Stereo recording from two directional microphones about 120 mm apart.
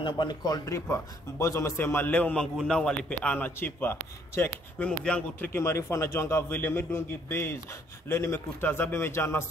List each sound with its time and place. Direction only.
0.0 s a man's voice: 40° left (ahead or behind); by 5.5 s 10° left (ahead or behind)
5.5 s a man's voice: 25° left (ahead or behind)